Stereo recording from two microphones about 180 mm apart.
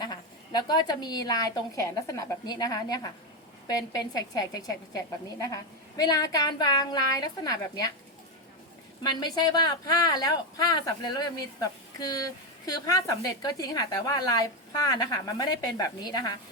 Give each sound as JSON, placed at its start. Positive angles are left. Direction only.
{"t": 0.0, "sound": "speech", "side_deg": 25}
{"t": 9.0, "sound": "speech", "side_deg": 25}